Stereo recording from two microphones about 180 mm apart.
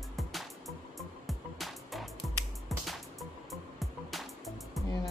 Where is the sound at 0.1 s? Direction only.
Centre (ahead or behind).